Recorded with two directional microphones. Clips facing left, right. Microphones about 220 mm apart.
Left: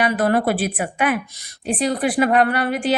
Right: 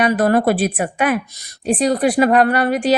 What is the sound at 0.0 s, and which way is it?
A woman's voice, 45° right (ahead or behind).